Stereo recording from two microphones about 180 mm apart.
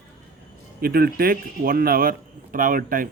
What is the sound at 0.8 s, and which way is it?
Speech, 55° right (ahead or behind).